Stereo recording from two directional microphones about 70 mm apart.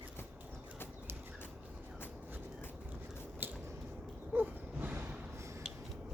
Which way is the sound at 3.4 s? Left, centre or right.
Right.